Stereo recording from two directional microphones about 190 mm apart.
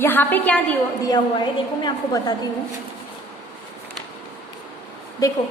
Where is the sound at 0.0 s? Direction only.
10° left (ahead or behind).